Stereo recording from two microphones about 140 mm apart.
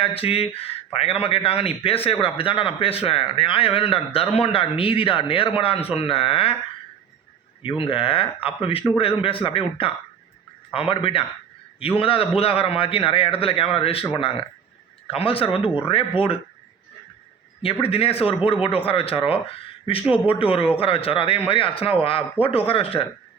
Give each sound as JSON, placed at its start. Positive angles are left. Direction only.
{"t": 0.0, "sound": "a man's voice", "side_deg": 45}
{"t": 7.6, "sound": "a man's voice", "side_deg": 40}
{"t": 17.6, "sound": "a man's voice", "side_deg": 40}